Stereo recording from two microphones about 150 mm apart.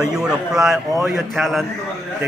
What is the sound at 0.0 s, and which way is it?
Speech, 5° right (ahead or behind).